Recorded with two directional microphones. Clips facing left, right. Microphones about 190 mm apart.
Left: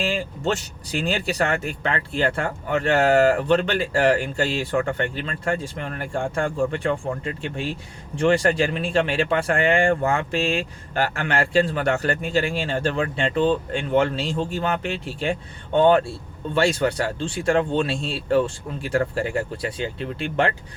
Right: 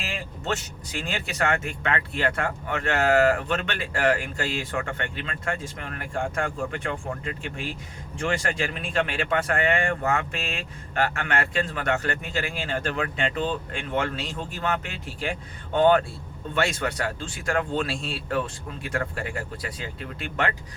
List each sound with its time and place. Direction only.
0.0 s speech: 30° left (ahead or behind)